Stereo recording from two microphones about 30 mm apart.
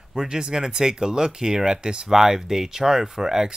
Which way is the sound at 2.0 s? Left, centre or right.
Centre.